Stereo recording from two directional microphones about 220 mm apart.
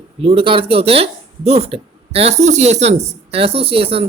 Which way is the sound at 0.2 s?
25° right (ahead or behind).